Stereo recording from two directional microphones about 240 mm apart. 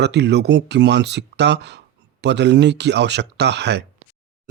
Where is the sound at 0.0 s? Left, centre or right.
Right.